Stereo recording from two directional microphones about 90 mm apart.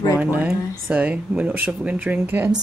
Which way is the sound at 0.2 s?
15° right (ahead or behind).